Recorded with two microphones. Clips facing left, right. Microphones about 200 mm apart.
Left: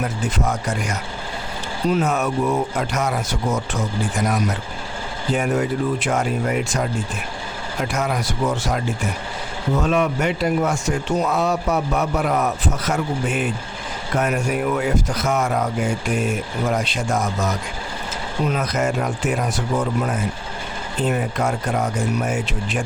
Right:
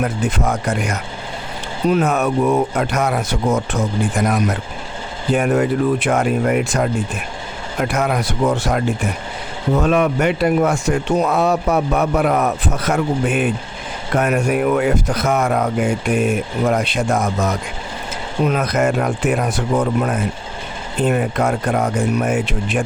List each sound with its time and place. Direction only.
0.0 s speech: 55° right (ahead or behind)
5.3 s speech: 60° right (ahead or behind)